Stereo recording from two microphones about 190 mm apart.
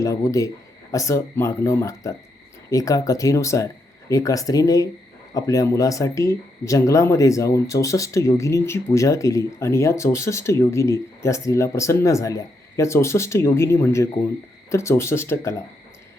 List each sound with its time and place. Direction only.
0.0 s speech: 15° left (ahead or behind)